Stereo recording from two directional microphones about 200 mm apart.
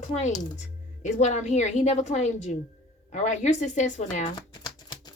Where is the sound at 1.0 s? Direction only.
35° left (ahead or behind).